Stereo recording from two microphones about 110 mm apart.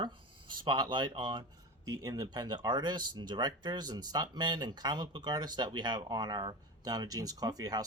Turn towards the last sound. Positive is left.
turn(degrees=-35)  # may be behind; listen again after turning